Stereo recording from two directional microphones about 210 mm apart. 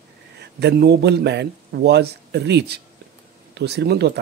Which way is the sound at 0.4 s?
55° right (ahead or behind).